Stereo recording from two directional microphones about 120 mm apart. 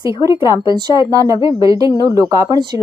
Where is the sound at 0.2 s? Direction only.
25° right (ahead or behind).